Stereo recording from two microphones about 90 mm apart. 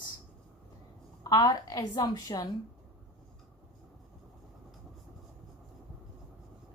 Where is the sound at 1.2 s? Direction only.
45° left (ahead or behind).